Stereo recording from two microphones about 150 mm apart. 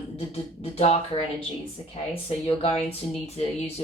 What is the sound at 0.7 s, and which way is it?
Speech, 45° left (ahead or behind).